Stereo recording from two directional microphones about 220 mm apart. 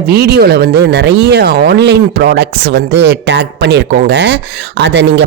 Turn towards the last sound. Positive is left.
turn(degrees=-55)  # may be behind; listen again after turning